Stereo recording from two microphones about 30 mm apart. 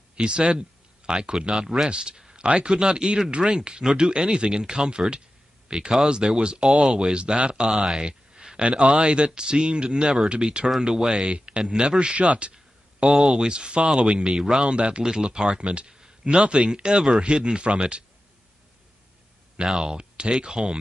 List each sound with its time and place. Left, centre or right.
0.1 s speech: right
3.4 s speech: centre
3.9 s speech: right
7.6 s speech: centre
8.4 s a sound: right
8.9 s speech: right
13.0 s speech: right
15.0 s speech: right
15.6 s speech: right
19.6 s speech: right